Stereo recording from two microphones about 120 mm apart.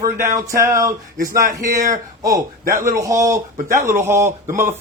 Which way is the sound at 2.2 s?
30° right (ahead or behind).